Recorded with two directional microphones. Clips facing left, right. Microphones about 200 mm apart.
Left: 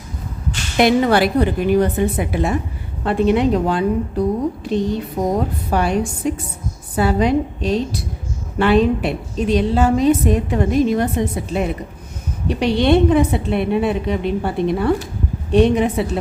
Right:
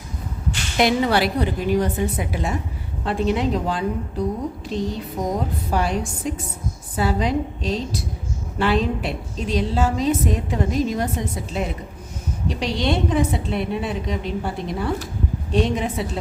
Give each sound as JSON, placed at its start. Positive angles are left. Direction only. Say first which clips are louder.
{"t": 0.8, "sound": "a woman's voice", "louder": "left 5 dB", "side_deg": 50}
{"t": 5.2, "sound": "a woman's voice", "louder": "left 4 dB", "side_deg": 60}